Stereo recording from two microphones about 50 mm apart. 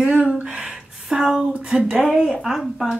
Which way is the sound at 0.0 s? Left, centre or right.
Right.